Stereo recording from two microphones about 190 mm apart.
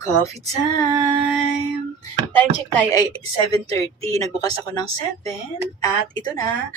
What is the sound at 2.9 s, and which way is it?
Speech, 20° left (ahead or behind).